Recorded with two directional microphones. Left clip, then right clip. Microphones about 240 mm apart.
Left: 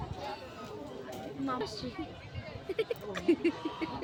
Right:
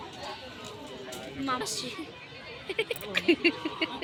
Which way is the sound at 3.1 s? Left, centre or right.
Centre.